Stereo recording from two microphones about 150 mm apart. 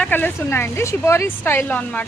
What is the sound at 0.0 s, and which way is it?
A woman's voice, 10° left (ahead or behind).